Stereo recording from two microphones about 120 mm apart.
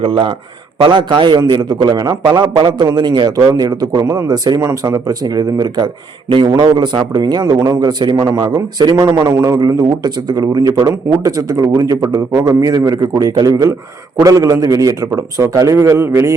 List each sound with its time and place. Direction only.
0.0 s a man's voice: 45° right (ahead or behind); by 16.3 s 25° right (ahead or behind)